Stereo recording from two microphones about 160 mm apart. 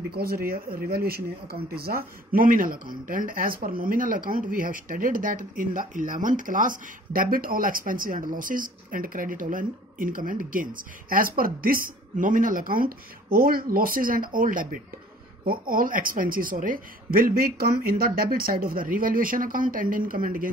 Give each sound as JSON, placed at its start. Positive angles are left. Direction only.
{"t": 0.1, "sound": "speech", "side_deg": -70}